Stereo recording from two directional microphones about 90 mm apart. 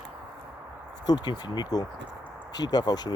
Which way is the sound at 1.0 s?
50° left (ahead or behind).